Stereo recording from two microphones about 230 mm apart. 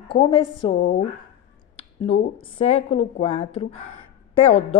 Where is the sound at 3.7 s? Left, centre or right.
Left.